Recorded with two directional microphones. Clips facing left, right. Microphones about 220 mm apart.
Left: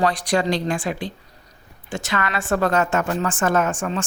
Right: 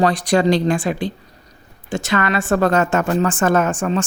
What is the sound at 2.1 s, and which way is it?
Speech, 35° right (ahead or behind).